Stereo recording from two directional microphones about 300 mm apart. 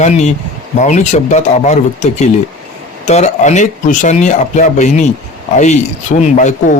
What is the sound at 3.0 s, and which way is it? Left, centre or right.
Speech, left.